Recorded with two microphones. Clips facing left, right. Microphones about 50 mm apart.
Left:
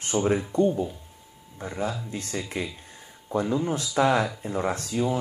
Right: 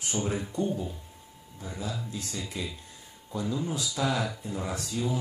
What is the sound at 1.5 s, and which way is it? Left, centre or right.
Speech, left.